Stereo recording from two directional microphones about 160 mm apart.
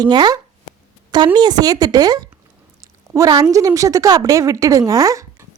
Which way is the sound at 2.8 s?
20° right (ahead or behind).